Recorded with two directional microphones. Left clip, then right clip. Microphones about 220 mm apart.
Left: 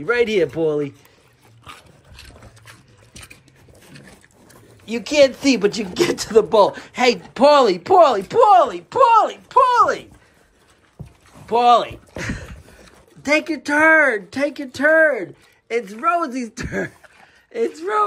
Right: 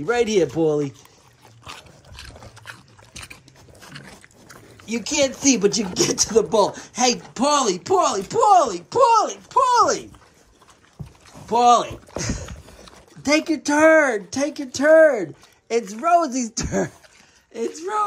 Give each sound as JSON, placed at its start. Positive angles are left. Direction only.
{"t": 0.0, "sound": "speech", "side_deg": -15}
{"t": 1.7, "sound": "dog", "side_deg": 0}
{"t": 4.8, "sound": "speech", "side_deg": -10}
{"t": 11.0, "sound": "clip-clop", "side_deg": 0}
{"t": 11.4, "sound": "speech", "side_deg": -15}
{"t": 12.2, "sound": "a sound", "side_deg": -20}
{"t": 12.4, "sound": "a sound", "side_deg": 0}
{"t": 13.2, "sound": "speech", "side_deg": -20}
{"t": 17.7, "sound": "speech", "side_deg": -10}